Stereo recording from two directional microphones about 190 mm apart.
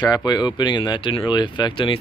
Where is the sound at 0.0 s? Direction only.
20° left (ahead or behind).